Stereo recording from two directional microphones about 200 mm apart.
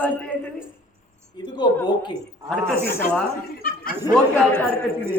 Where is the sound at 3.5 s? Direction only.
45° left (ahead or behind).